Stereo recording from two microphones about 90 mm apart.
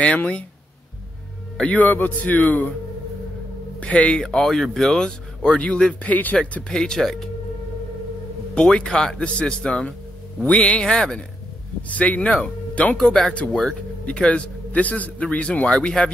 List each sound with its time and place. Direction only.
0.0 s speech: 15° left (ahead or behind)
1.6 s speech: 15° left (ahead or behind)
3.8 s speech: 15° left (ahead or behind)
8.5 s speech: 10° left (ahead or behind)